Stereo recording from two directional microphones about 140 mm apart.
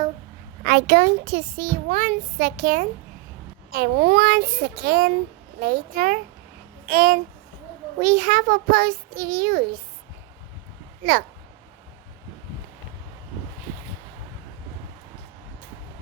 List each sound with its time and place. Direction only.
0.6 s a child's voice: 90° right; by 2.8 s 75° right (ahead or behind)
3.7 s a child's voice: 90° right
7.9 s a child's voice: 55° right (ahead or behind); by 9.6 s 90° right